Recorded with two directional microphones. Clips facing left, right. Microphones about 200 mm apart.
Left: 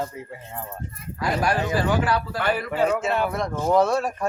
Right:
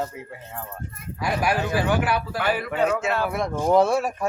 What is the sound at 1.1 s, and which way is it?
Speech, 10° right (ahead or behind).